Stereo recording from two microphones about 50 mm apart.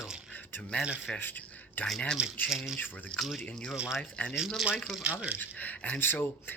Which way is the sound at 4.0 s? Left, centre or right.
Left.